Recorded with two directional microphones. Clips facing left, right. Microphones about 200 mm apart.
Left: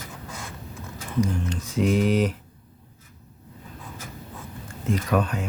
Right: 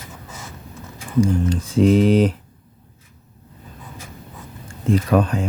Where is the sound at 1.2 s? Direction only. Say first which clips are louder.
Right 7 dB; 30° right (ahead or behind).